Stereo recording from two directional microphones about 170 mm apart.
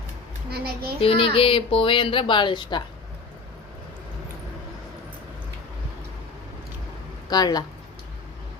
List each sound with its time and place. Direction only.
0.5 s child singing: 65° right (ahead or behind)
1.0 s speech: 30° left (ahead or behind)
7.3 s speech: 25° left (ahead or behind)